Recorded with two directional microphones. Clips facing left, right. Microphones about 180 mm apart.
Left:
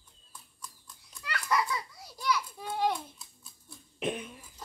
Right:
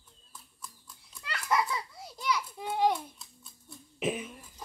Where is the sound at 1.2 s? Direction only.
25° right (ahead or behind).